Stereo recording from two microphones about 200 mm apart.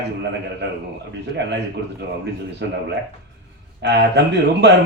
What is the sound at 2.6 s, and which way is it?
Speech, 60° right (ahead or behind).